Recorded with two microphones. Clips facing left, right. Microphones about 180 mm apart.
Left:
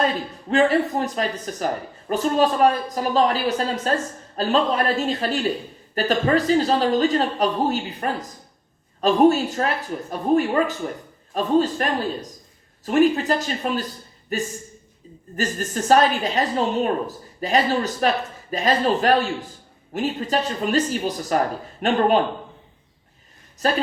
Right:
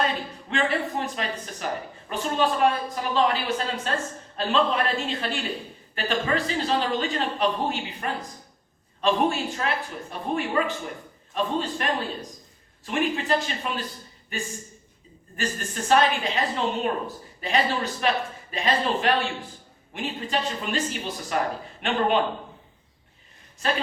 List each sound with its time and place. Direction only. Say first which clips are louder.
0.5 s a woman's voice: left 8 dB; 40° left (ahead or behind)
23.6 s a woman's voice: left 5 dB; 40° left (ahead or behind)